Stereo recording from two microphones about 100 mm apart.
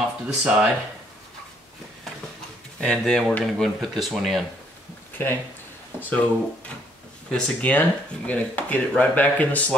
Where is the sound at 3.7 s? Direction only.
Centre (ahead or behind).